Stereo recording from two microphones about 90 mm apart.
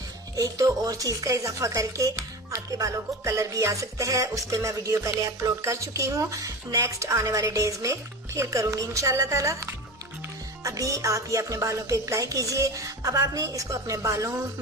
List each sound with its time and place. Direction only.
0.4 s speech: 40° right (ahead or behind)